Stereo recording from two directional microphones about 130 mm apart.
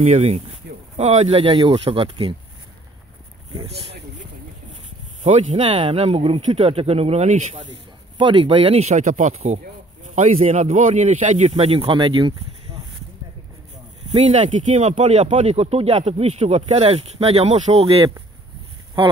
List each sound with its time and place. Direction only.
0.0 s speech: 55° right (ahead or behind)
5.2 s speech: 60° right (ahead or behind)
8.2 s speech: 40° right (ahead or behind)
14.1 s speech: 65° right (ahead or behind); by 18.1 s 50° right (ahead or behind)